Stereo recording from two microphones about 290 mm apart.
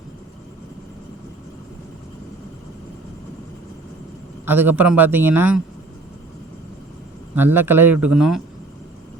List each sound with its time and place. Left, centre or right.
4.4 s speech: centre
7.3 s speech: centre